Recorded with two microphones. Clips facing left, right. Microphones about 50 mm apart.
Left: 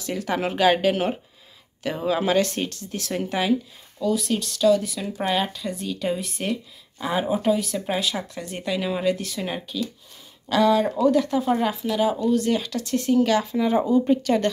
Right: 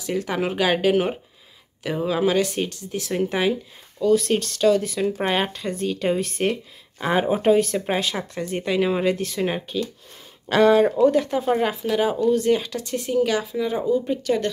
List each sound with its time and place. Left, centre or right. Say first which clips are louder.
0.3 s speech: left 3 dB; centre
2.7 s speech: right 2 dB; centre
4.0 s speech: right 5 dB; right
9.4 s speech: right 4 dB; right
13.6 s speech: left 2 dB; centre